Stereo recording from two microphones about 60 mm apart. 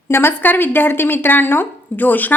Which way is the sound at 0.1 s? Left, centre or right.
Left.